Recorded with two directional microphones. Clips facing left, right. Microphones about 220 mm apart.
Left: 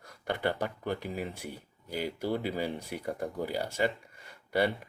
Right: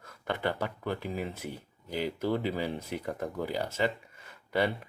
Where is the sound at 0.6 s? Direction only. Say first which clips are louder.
Even; 15° left (ahead or behind).